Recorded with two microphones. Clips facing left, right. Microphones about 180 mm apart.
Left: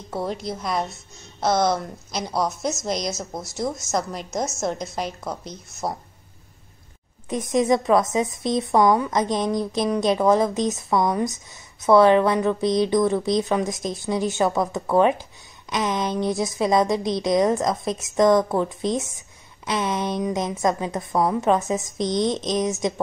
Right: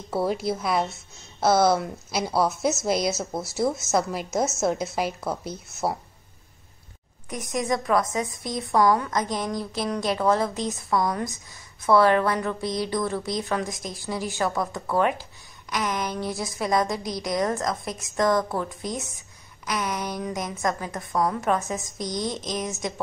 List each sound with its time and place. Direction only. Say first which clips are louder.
0.1 s a woman's voice: right 3 dB; 5° right (ahead or behind)
7.2 s a woman's voice: left 7 dB; 25° left (ahead or behind)